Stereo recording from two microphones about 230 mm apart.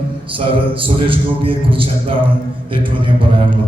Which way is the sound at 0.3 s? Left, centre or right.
Right.